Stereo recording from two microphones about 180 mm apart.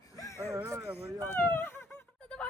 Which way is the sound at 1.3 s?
10° left (ahead or behind).